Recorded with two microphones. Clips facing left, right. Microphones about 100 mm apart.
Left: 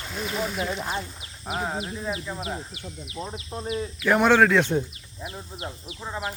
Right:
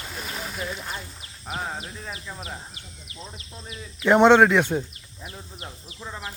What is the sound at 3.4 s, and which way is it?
Speech, 55° left (ahead or behind).